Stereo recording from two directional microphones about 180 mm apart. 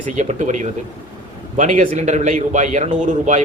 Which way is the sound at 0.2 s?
40° right (ahead or behind).